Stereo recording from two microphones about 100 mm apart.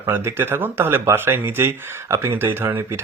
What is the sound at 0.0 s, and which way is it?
Speech, 20° right (ahead or behind).